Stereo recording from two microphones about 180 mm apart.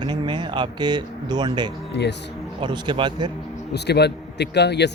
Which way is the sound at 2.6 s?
25° right (ahead or behind).